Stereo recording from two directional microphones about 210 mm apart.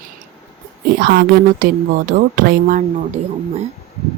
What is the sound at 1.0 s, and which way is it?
A woman's voice, 45° right (ahead or behind).